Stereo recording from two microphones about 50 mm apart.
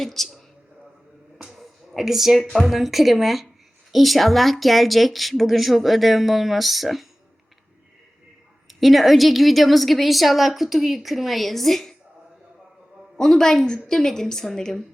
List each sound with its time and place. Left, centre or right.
0.0 s a woman's voice: centre
1.4 s a sound: centre
1.9 s a woman's voice: centre
8.6 s a woman's voice: centre
13.1 s a woman's voice: centre